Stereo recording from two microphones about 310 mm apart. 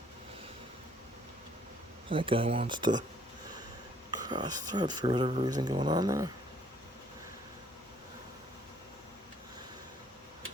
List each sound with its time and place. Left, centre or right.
2.0 s speech: centre
4.3 s speech: centre